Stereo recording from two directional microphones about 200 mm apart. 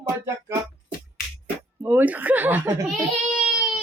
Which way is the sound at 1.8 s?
10° right (ahead or behind).